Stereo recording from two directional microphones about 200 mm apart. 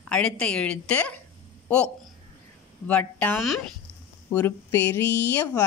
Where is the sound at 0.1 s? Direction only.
5° left (ahead or behind).